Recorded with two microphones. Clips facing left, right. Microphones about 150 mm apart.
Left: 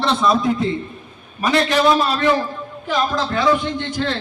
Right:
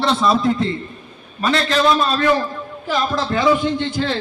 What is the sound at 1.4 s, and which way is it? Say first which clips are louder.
Speech: left 1 dB; 15° left (ahead or behind).